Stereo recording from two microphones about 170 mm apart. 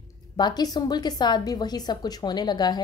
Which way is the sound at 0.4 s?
25° left (ahead or behind).